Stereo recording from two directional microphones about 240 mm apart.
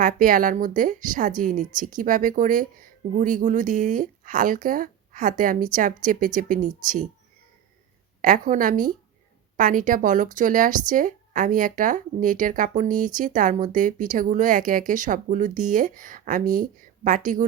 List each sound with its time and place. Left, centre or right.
0.0 s speech: right
8.2 s speech: right